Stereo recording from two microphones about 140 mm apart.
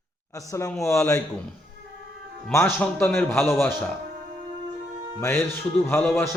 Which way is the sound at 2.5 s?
20° left (ahead or behind).